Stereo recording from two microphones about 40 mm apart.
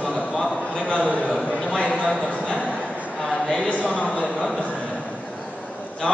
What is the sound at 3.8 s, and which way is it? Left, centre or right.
Speech, right.